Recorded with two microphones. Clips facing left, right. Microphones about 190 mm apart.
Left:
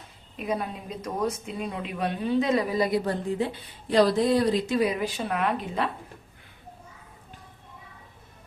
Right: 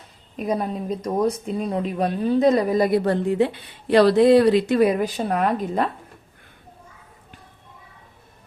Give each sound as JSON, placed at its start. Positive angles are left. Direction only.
{"t": 0.3, "sound": "speech", "side_deg": -40}